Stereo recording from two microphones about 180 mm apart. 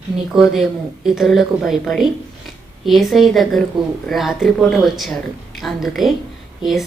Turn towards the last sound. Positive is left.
turn(degrees=0)  # may be behind; listen again after turning